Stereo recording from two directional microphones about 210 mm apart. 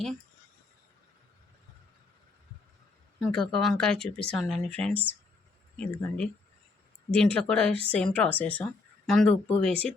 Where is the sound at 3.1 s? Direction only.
Centre (ahead or behind).